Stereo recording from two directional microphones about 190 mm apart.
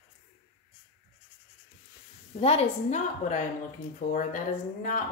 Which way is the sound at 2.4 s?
30° left (ahead or behind).